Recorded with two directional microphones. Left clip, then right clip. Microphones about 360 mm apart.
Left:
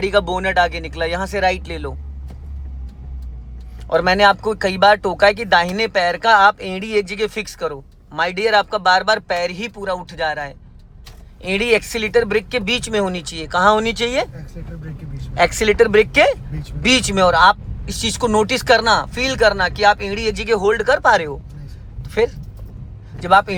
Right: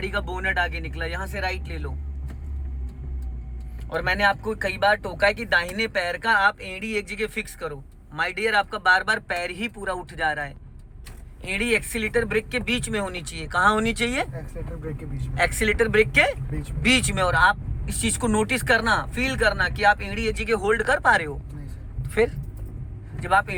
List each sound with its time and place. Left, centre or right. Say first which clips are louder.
0.0 s speech: left 10 dB; centre
3.8 s speech: left 9 dB; centre
15.4 s speech: left 8 dB; centre